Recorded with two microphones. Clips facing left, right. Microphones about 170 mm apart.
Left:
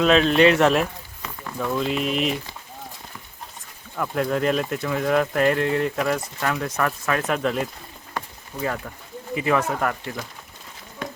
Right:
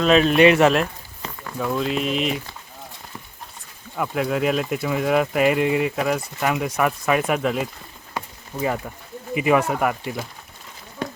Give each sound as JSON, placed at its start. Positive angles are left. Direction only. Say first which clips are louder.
{"t": 0.0, "sound": "speech", "louder": "right 1 dB", "side_deg": -5}
{"t": 3.9, "sound": "speech", "louder": "right 1 dB", "side_deg": -5}
{"t": 8.5, "sound": "speech", "louder": "right 3 dB", "side_deg": -20}